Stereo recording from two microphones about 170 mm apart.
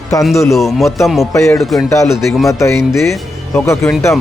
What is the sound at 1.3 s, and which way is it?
A man's voice, 20° left (ahead or behind).